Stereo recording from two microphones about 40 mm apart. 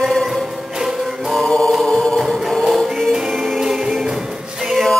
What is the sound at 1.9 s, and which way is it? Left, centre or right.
Music, centre.